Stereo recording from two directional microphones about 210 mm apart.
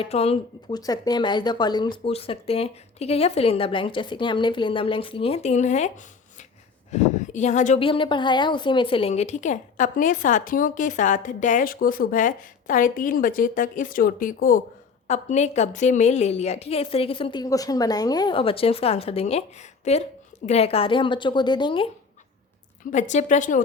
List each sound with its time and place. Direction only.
0.0 s speech: 30° left (ahead or behind)
0.8 s speech: 20° left (ahead or behind); by 5.9 s 35° left (ahead or behind)
6.9 s speech: 35° left (ahead or behind)
22.9 s speech: 35° left (ahead or behind)